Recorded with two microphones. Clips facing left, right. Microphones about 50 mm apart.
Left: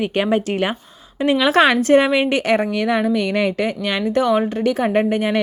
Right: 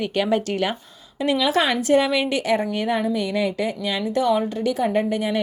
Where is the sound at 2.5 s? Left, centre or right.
Left.